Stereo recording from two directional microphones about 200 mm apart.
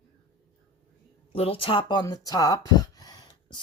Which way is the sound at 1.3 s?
30° left (ahead or behind).